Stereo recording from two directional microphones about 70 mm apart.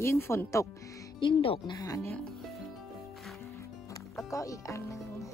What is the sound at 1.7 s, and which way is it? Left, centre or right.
Speech, left.